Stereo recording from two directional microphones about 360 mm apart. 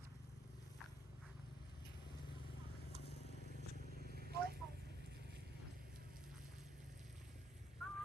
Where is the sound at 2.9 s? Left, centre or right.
Left.